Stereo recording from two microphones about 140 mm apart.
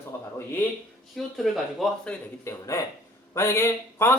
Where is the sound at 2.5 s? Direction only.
20° left (ahead or behind).